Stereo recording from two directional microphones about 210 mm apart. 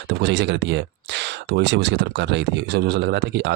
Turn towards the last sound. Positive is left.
turn(degrees=-55)  # may be behind; listen again after turning